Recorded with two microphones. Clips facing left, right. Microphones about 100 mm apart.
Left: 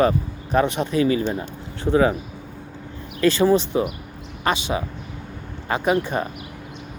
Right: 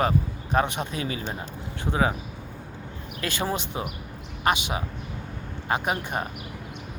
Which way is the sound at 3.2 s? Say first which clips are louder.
Left 12 dB; 15° right (ahead or behind).